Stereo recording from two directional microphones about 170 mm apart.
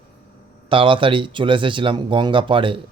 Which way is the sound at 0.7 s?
30° right (ahead or behind).